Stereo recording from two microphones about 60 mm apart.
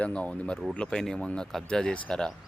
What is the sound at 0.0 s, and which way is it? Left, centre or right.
Speech, left.